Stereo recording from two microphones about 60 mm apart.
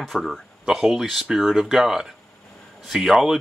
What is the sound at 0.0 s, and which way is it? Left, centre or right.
Speech, centre.